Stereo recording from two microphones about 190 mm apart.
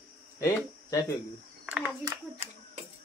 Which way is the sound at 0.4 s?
15° left (ahead or behind).